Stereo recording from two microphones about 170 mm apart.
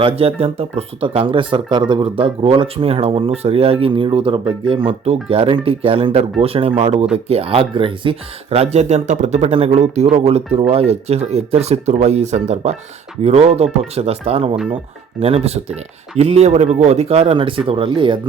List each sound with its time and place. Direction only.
0.0 s speech: 35° right (ahead or behind)
14.5 s speech: 5° right (ahead or behind)
15.2 s speech: 35° right (ahead or behind)